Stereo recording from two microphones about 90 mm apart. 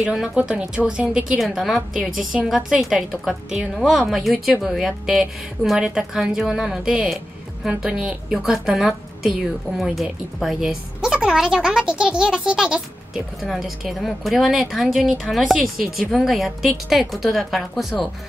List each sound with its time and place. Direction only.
0.1 s a woman's voice: 10° right (ahead or behind)
1.4 s a woman's voice: centre (ahead or behind)